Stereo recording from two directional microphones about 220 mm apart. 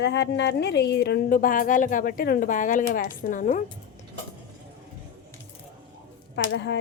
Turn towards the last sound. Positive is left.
turn(degrees=50)  # may be behind; listen again after turning